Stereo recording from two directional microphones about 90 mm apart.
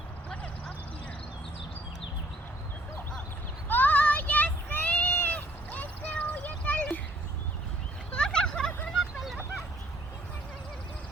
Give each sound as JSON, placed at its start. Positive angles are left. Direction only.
{"t": 3.7, "sound": "child singing", "side_deg": 20}
{"t": 8.1, "sound": "turkey", "side_deg": 10}
{"t": 9.1, "sound": "a sound", "side_deg": 0}